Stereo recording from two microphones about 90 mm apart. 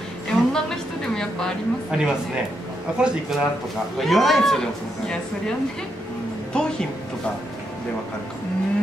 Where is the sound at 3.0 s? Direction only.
10° right (ahead or behind).